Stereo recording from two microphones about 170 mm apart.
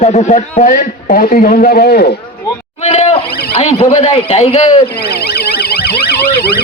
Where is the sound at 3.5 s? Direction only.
40° left (ahead or behind).